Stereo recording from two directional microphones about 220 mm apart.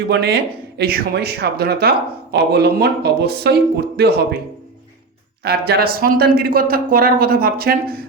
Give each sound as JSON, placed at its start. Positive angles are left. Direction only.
{"t": 0.1, "sound": "speech", "side_deg": -50}
{"t": 5.4, "sound": "speech", "side_deg": -45}